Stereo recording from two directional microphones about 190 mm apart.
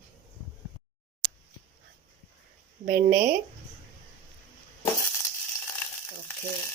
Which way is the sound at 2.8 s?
50° right (ahead or behind).